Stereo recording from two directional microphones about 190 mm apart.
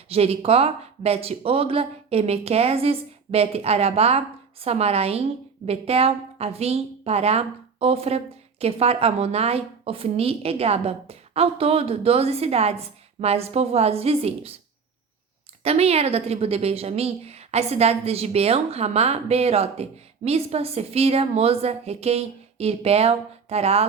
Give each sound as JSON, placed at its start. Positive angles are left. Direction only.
{"t": 0.1, "sound": "a woman's voice", "side_deg": -30}
{"t": 15.6, "sound": "a woman's voice", "side_deg": -35}